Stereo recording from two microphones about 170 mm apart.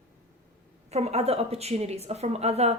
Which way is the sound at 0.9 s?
40° right (ahead or behind).